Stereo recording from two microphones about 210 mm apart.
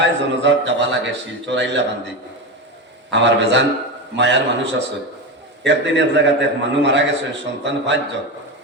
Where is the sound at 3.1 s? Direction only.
55° right (ahead or behind).